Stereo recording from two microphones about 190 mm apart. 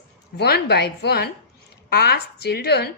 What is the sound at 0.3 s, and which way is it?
A woman's voice, 60° left (ahead or behind).